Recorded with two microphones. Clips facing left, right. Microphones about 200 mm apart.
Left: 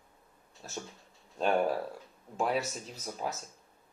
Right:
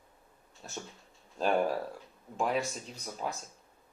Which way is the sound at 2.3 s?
Centre (ahead or behind).